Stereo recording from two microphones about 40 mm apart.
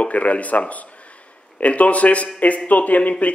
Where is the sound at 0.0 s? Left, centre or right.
Left.